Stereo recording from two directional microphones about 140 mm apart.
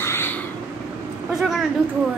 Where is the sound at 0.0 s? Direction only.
15° left (ahead or behind).